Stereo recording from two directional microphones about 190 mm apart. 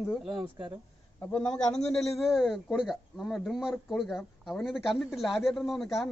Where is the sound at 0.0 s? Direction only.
Centre (ahead or behind).